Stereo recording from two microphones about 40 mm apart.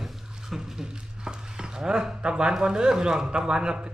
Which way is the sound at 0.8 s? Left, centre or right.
Centre.